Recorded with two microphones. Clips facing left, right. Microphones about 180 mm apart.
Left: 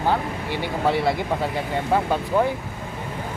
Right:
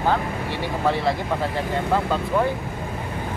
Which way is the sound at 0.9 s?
10° left (ahead or behind).